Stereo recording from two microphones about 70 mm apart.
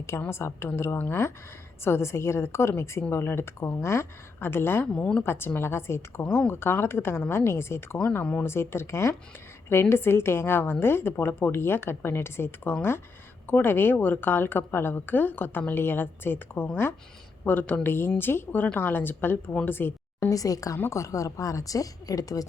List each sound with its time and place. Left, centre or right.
0.3 s a woman's voice: left
4.9 s speech: centre
5.2 s a woman's voice: left
8.2 s a woman's voice: left
8.4 s a woman's voice: left
20.3 s speech: left